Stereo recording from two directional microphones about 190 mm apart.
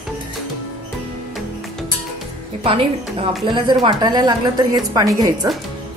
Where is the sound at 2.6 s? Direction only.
30° right (ahead or behind).